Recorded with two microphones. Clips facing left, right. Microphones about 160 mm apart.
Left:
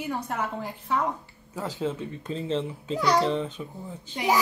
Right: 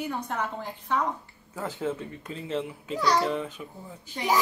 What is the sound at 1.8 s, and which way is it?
A child's voice, 20° left (ahead or behind).